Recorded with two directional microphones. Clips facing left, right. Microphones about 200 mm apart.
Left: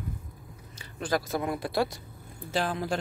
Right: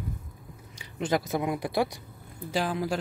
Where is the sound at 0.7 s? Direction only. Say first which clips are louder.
Right 2 dB; 20° right (ahead or behind).